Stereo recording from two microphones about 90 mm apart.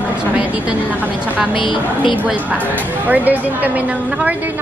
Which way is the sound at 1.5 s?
65° left (ahead or behind).